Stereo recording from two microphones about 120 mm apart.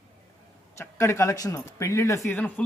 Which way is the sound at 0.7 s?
20° left (ahead or behind).